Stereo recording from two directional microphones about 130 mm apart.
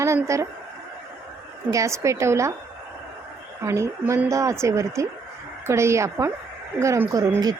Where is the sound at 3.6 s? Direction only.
25° right (ahead or behind).